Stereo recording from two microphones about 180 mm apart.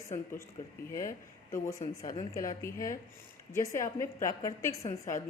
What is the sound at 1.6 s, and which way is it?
A woman's voice, 15° left (ahead or behind).